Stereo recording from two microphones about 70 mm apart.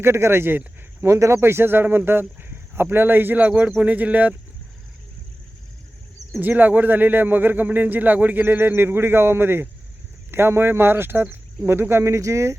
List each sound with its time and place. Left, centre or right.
0.0 s speech: right
6.4 s speech: right